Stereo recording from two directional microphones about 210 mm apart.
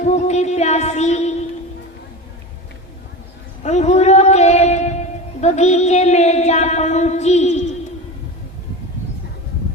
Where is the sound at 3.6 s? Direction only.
30° left (ahead or behind).